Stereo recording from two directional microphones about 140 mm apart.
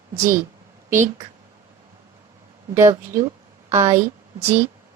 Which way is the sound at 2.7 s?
20° right (ahead or behind).